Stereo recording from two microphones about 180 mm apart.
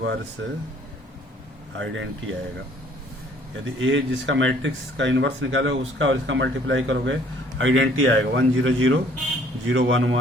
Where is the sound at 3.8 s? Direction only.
90° right.